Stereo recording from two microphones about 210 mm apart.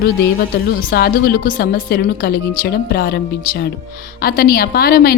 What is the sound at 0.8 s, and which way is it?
A woman's voice, 45° left (ahead or behind).